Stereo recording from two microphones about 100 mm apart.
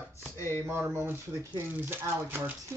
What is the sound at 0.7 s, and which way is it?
Speech, 25° right (ahead or behind).